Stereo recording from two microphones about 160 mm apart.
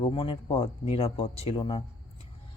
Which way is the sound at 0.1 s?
30° left (ahead or behind).